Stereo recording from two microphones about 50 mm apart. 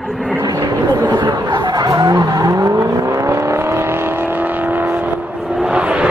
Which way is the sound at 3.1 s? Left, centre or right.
Right.